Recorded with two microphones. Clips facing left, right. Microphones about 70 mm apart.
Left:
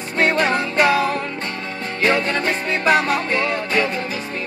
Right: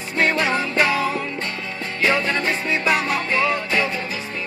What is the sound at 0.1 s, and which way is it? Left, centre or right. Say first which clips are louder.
Music: left 2 dB; left.